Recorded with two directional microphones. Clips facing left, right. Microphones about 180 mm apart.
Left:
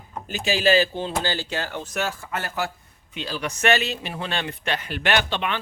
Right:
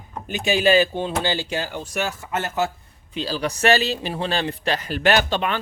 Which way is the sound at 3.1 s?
35° right (ahead or behind).